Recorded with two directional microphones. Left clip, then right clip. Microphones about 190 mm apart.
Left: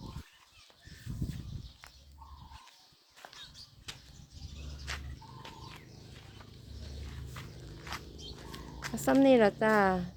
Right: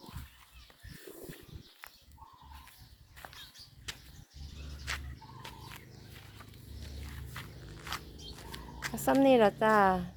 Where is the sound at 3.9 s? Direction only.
60° right (ahead or behind).